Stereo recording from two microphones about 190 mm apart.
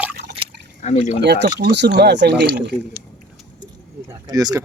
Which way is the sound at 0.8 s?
40° left (ahead or behind).